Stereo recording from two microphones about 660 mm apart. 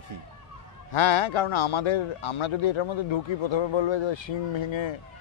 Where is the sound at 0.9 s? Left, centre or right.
Left.